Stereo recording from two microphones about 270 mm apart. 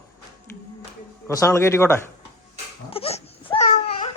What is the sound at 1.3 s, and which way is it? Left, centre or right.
Speech, centre.